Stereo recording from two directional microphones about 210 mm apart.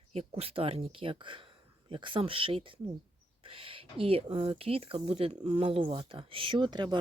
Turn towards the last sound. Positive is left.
turn(degrees=-20)  # may be behind; listen again after turning